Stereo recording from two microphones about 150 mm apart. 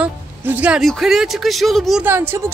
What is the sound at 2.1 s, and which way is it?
Speech, 15° right (ahead or behind).